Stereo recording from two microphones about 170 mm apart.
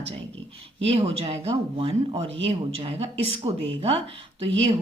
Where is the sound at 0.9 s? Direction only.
35° right (ahead or behind).